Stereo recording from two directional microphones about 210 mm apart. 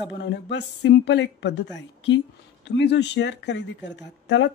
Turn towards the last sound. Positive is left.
turn(degrees=55)  # may be behind; listen again after turning